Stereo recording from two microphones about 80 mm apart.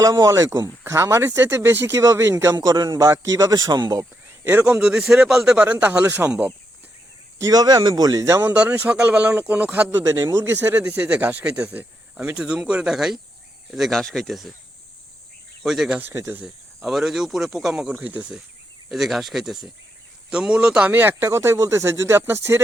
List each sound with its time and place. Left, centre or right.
0.0 s speech: right
2.0 s a man's voice: right
4.6 s speech: centre
5.5 s speech: centre
7.3 s a man's voice: right
8.4 s speech: centre
10.0 s speech: right; by 14.5 s centre
15.6 s speech: centre
16.0 s speech: right
16.8 s speech: centre
17.9 s speech: centre
18.9 s speech: centre
20.9 s speech: right